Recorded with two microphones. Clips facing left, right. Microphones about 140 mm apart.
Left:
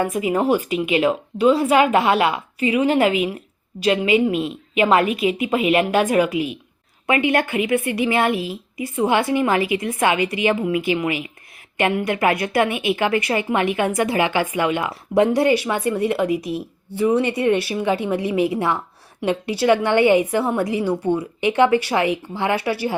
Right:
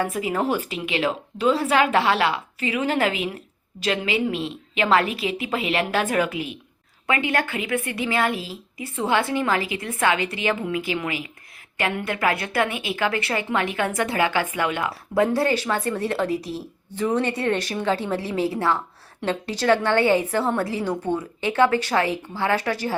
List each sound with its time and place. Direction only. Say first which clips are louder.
0.3 s a woman's voice: left 5 dB; 15° left (ahead or behind)
4.4 s a woman's voice: left 5 dB; 30° right (ahead or behind)
4.8 s a woman's voice: left 4 dB; 15° left (ahead or behind)